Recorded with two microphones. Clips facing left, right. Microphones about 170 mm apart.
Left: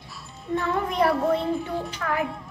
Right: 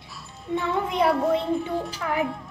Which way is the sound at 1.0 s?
Centre (ahead or behind).